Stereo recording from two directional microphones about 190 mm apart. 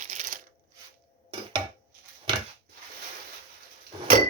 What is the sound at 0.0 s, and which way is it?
Shuffling cards, 40° right (ahead or behind).